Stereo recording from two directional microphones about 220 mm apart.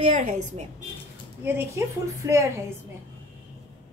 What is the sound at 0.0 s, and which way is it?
Speech, 30° right (ahead or behind).